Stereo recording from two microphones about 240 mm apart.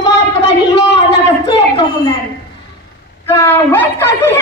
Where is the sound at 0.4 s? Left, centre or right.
Left.